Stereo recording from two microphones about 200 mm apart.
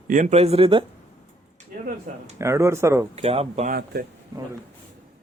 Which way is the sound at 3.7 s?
45° right (ahead or behind).